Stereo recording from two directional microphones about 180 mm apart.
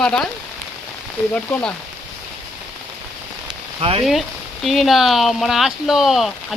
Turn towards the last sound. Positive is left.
turn(degrees=0)  # may be behind; listen again after turning